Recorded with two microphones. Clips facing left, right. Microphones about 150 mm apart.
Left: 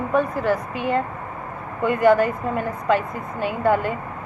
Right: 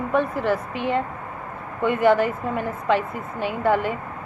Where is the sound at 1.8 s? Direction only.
5° left (ahead or behind).